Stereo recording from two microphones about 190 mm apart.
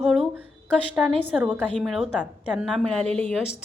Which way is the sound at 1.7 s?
5° left (ahead or behind).